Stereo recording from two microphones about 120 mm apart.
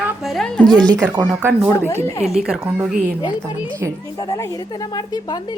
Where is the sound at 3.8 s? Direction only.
20° right (ahead or behind).